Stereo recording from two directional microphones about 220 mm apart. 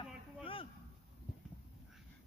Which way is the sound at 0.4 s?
25° left (ahead or behind).